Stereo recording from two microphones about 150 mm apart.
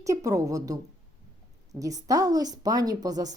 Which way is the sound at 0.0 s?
20° right (ahead or behind).